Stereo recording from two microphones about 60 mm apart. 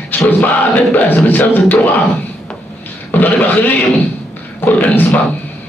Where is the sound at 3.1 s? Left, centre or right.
Left.